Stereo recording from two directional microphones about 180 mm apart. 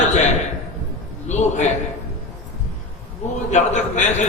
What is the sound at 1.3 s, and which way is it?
Speech, 40° left (ahead or behind).